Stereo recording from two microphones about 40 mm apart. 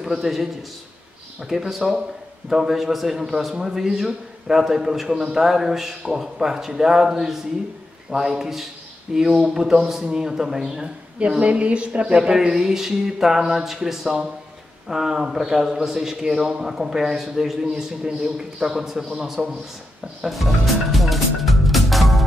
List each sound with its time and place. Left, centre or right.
0.0 s a man's voice: centre
11.1 s a woman's voice: right; by 19.4 s centre
20.2 s music: centre